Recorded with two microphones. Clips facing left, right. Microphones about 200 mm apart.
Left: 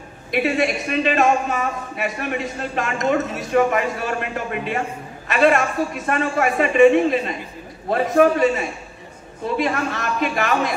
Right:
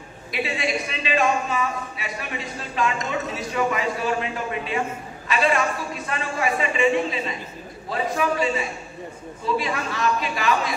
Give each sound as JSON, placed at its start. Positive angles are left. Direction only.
{"t": 0.3, "sound": "speech", "side_deg": 50}